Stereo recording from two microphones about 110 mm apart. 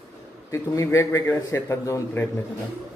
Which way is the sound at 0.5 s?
25° left (ahead or behind).